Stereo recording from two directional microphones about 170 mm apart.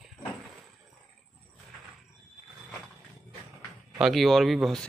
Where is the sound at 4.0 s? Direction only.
Centre (ahead or behind).